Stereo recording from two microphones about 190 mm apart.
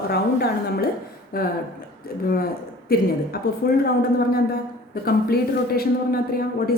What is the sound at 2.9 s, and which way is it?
Speech, 50° left (ahead or behind).